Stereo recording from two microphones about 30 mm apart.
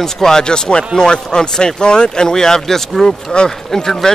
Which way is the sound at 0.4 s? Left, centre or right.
Left.